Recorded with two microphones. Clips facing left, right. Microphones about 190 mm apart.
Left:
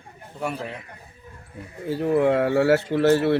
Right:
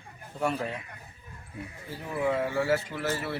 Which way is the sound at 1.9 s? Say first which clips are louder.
Left 10 dB; 70° left (ahead or behind).